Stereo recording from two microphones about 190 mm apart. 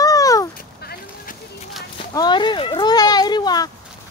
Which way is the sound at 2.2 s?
25° left (ahead or behind).